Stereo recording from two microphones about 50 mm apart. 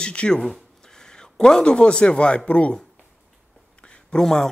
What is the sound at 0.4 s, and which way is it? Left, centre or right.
Speech, centre.